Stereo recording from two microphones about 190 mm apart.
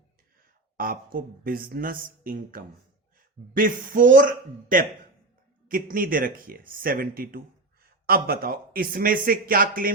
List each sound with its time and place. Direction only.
0.8 s speech: 50° right (ahead or behind)